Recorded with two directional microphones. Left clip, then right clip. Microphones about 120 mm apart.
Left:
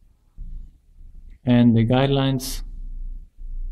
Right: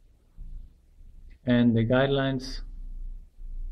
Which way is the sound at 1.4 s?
35° left (ahead or behind).